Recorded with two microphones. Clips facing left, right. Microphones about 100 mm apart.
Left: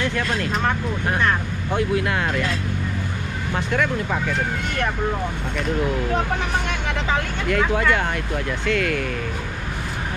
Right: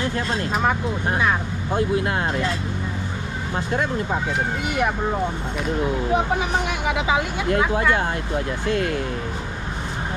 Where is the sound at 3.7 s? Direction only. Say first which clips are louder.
Left 1 dB; 25° right (ahead or behind).